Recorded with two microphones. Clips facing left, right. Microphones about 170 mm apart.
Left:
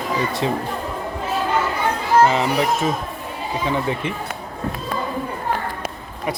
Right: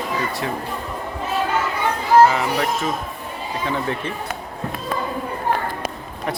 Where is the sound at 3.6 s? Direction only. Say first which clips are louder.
Left 2 dB; 15° left (ahead or behind).